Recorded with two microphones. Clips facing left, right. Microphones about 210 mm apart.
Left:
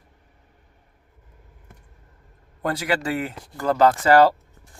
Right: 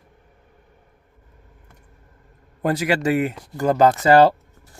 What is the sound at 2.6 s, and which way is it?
Speech, 20° right (ahead or behind).